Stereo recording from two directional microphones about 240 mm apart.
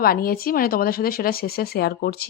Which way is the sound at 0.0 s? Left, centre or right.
Left.